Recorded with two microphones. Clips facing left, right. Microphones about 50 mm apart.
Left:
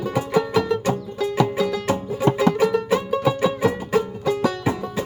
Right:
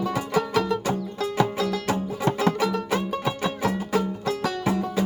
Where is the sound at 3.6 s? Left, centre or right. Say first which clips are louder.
Left 4 dB; centre.